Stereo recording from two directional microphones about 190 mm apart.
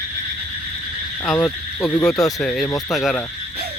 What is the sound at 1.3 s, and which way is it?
Speech, 5° left (ahead or behind).